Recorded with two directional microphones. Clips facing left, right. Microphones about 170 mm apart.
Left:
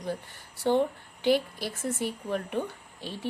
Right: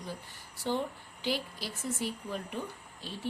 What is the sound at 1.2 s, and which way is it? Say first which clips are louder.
A woman's voice: left 9 dB; 55° left (ahead or behind).